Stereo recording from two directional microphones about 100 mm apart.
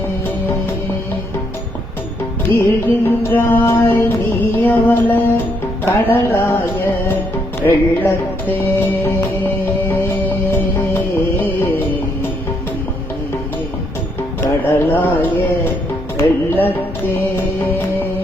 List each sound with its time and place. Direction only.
2.5 s music: 20° left (ahead or behind)
14.4 s speech: 20° left (ahead or behind)
16.1 s music: 20° left (ahead or behind)